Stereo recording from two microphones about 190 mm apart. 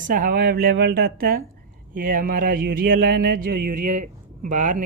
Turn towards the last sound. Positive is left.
turn(degrees=-40)  # may be behind; listen again after turning